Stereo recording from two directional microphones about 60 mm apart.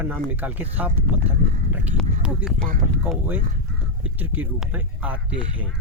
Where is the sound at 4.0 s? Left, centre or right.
Right.